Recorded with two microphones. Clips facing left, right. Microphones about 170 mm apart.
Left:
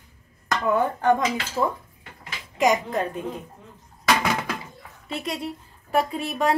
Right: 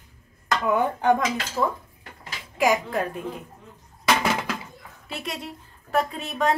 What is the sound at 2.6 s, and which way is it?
Speech, 5° right (ahead or behind).